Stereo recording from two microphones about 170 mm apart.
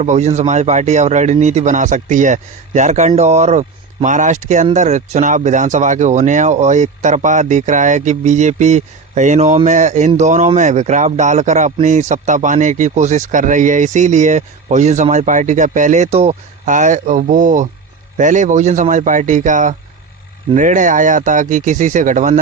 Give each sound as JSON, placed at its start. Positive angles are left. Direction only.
{"t": 0.0, "sound": "a man's voice", "side_deg": -40}